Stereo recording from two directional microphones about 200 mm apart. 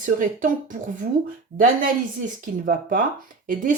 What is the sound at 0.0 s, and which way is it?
Speech, 40° right (ahead or behind).